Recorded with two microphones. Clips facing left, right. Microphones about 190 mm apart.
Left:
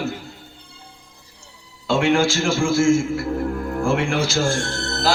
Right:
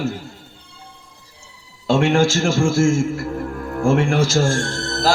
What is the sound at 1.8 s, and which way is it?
A man's voice, 45° right (ahead or behind).